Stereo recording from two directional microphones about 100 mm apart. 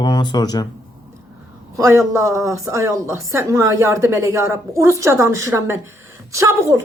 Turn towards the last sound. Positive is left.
turn(degrees=-30)  # may be behind; listen again after turning